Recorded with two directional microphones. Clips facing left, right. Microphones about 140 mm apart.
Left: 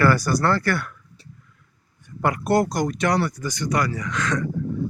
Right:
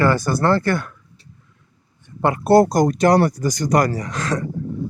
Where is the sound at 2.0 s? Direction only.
25° right (ahead or behind).